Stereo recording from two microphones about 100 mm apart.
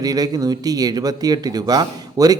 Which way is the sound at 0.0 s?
40° right (ahead or behind).